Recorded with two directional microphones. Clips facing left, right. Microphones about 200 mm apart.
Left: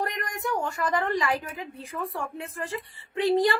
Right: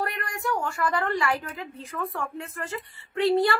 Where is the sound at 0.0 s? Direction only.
20° left (ahead or behind).